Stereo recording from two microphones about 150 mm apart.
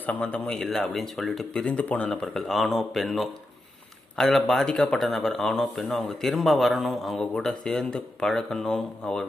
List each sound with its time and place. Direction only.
0.0 s speech: 10° left (ahead or behind)